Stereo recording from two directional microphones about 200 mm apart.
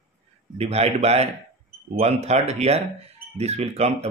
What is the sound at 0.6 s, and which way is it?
Speech, 30° right (ahead or behind).